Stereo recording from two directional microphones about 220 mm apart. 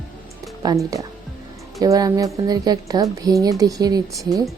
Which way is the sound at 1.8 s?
15° right (ahead or behind).